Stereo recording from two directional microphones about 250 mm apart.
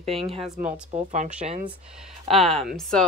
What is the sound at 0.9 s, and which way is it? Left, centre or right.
Speech, right.